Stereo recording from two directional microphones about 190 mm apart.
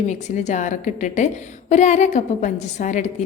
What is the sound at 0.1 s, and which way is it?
A woman's voice, 35° left (ahead or behind).